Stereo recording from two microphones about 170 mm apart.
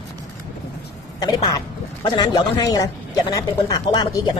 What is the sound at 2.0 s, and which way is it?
Speech, 25° left (ahead or behind).